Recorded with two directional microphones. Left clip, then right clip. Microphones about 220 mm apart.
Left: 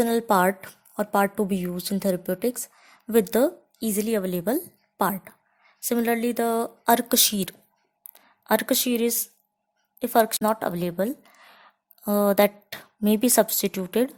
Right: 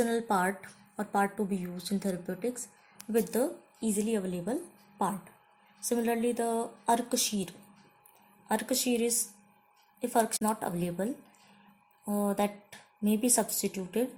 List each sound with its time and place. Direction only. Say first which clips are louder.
0.0 s a woman's voice: left 8 dB; 35° left (ahead or behind)